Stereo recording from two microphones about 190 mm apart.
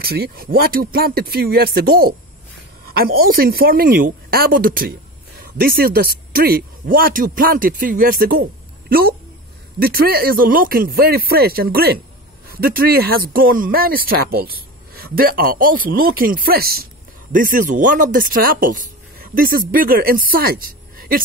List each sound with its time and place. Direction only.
0.0 s speech: 55° right (ahead or behind)